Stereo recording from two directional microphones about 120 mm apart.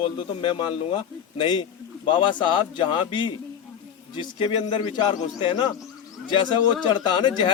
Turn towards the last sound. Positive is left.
turn(degrees=40)  # may be behind; listen again after turning